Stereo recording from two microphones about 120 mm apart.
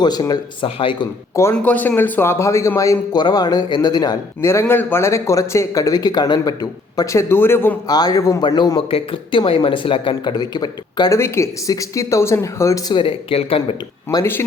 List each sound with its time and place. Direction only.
0.0 s speech: 35° left (ahead or behind)
0.8 s speech: 45° left (ahead or behind)
1.6 s speech: 15° left (ahead or behind); by 4.2 s 35° left (ahead or behind)
4.4 s speech: 25° left (ahead or behind)
7.9 s speech: 35° left (ahead or behind)
12.9 s speech: 45° left (ahead or behind)